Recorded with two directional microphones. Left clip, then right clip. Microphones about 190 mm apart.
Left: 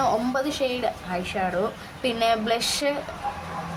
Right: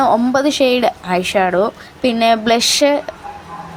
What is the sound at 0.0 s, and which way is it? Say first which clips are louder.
A woman's voice: right 10 dB; 40° right (ahead or behind).